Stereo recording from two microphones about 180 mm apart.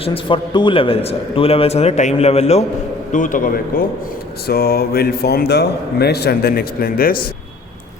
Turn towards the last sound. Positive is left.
turn(degrees=55)  # may be behind; listen again after turning